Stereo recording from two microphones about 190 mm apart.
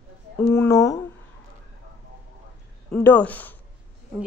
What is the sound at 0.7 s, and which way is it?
Speech, 15° left (ahead or behind).